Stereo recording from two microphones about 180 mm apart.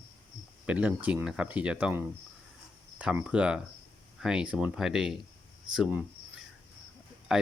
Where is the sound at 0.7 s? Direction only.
5° right (ahead or behind).